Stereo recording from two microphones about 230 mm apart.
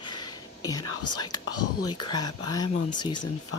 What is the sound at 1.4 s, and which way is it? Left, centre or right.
Speech, left.